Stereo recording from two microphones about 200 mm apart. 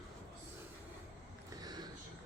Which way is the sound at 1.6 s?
20° right (ahead or behind).